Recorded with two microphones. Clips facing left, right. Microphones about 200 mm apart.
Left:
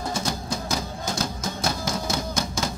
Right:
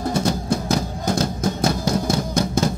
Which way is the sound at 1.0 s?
60° right (ahead or behind).